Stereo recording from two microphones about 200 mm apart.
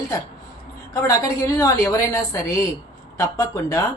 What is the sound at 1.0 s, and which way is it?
Speech, 15° left (ahead or behind).